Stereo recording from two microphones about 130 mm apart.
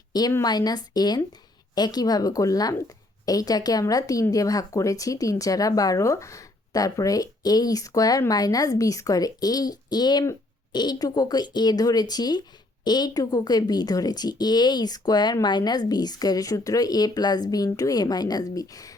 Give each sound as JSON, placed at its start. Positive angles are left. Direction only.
{"t": 0.1, "sound": "a woman's voice", "side_deg": 30}